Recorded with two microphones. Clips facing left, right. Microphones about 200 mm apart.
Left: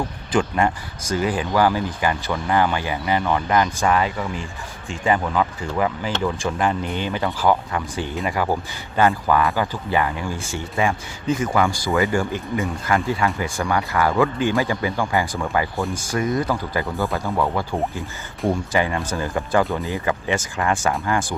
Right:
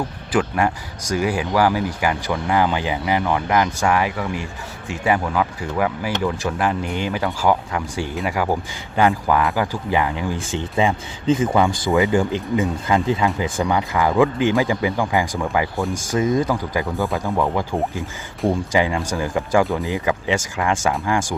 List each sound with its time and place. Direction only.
0.3 s speech: 5° right (ahead or behind)
15.8 s speech: centre (ahead or behind)
16.1 s speech: 20° right (ahead or behind)